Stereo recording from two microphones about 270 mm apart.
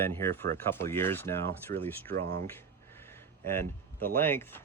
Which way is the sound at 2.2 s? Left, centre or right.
Right.